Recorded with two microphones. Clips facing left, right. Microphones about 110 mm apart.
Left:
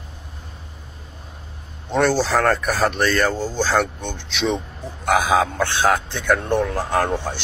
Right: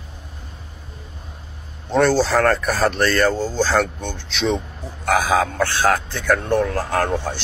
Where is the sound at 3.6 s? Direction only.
15° left (ahead or behind).